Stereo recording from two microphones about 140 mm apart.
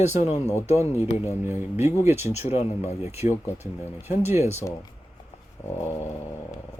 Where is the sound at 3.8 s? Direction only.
15° left (ahead or behind).